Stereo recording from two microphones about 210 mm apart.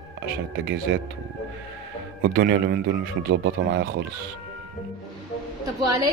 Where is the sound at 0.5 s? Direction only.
55° right (ahead or behind).